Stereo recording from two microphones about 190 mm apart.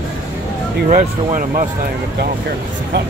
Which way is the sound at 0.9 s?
40° right (ahead or behind).